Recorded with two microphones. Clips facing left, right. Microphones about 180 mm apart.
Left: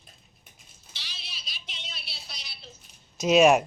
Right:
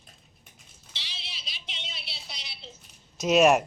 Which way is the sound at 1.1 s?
25° right (ahead or behind).